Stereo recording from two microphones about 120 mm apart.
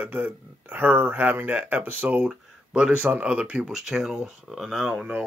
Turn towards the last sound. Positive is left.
turn(degrees=0)  # may be behind; listen again after turning